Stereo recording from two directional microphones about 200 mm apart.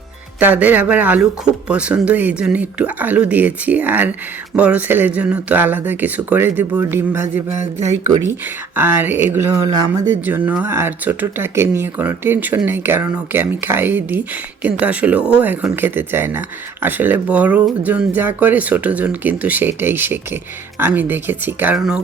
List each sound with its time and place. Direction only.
0.3 s speech: 10° right (ahead or behind)
7.6 s speech: 35° right (ahead or behind)
8.3 s speech: 10° right (ahead or behind)